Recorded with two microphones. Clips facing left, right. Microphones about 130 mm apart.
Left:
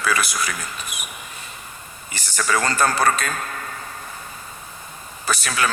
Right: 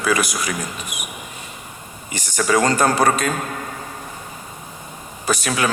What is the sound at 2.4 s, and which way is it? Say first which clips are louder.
A man's voice: right 4 dB; 20° right (ahead or behind).